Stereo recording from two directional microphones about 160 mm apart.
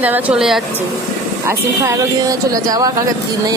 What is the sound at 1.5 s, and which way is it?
A woman's voice, 20° right (ahead or behind).